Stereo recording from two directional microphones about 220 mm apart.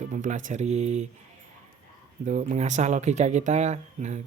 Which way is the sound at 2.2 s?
35° right (ahead or behind).